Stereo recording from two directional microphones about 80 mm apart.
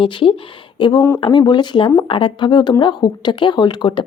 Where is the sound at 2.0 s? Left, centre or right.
Left.